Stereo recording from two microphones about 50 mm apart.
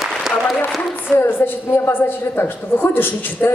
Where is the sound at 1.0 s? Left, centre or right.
Left.